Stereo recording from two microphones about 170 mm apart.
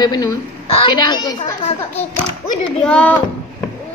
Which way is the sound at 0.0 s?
25° left (ahead or behind).